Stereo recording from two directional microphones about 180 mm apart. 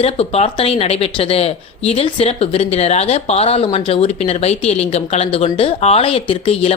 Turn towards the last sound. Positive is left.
turn(degrees=35)  # may be behind; listen again after turning